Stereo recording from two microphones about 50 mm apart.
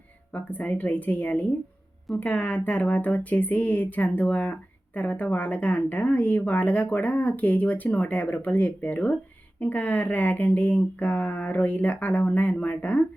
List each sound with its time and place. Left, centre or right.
0.3 s speech: left